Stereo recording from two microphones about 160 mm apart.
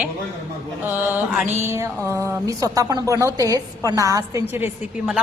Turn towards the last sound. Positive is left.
turn(degrees=-10)  # may be behind; listen again after turning